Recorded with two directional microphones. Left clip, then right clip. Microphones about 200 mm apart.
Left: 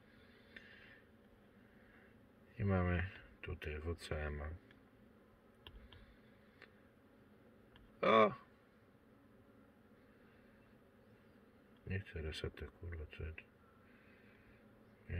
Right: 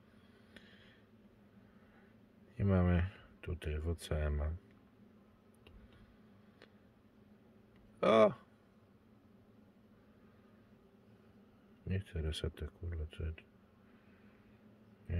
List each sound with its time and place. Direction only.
2.5 s speech: 35° right (ahead or behind)
8.0 s speech: 35° right (ahead or behind)
11.9 s speech: 35° right (ahead or behind)